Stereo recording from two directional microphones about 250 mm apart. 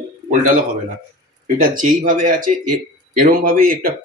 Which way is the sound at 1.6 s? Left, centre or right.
Right.